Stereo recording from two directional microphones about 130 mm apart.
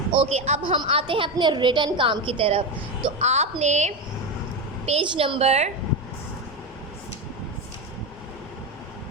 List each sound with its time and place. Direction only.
0.1 s speech: 55° right (ahead or behind)
0.8 s a woman's voice: 45° right (ahead or behind); by 3.9 s 60° right (ahead or behind)
4.9 s a woman's voice: 45° right (ahead or behind)